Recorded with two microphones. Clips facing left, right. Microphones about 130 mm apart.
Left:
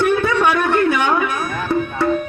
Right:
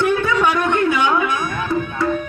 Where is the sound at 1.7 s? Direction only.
25° left (ahead or behind).